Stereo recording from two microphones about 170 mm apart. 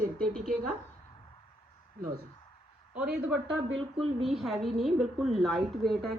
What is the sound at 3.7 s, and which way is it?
Speech, 35° right (ahead or behind).